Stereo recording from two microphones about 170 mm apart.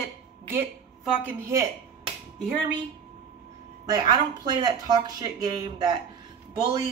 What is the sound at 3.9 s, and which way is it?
Speech, 25° right (ahead or behind).